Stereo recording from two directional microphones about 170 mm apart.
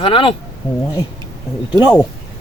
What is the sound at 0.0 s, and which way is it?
Speech, 30° left (ahead or behind).